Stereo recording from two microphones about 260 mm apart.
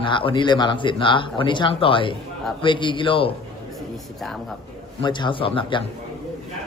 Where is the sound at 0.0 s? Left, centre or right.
Centre.